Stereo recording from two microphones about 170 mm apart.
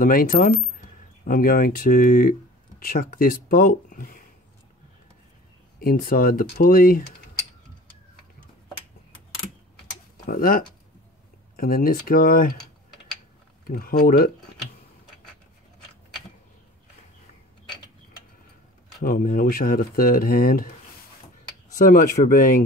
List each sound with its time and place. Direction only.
0.0 s speech: 55° left (ahead or behind)
5.8 s speech: 60° left (ahead or behind)
10.2 s speech: 55° left (ahead or behind)
13.7 s speech: 60° left (ahead or behind)
18.9 s speech: 55° left (ahead or behind)
21.7 s speech: 50° left (ahead or behind)